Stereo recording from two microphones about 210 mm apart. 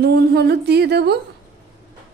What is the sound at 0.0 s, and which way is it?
A woman's voice, 50° right (ahead or behind).